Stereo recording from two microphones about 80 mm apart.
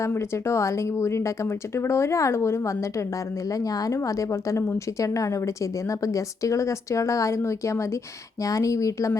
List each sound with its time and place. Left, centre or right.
0.0 s speech: left
3.6 s a woman's voice: left